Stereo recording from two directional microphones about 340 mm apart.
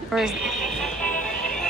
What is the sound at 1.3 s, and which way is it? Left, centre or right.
Music, centre.